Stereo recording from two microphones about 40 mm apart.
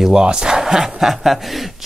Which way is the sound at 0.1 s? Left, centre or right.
Right.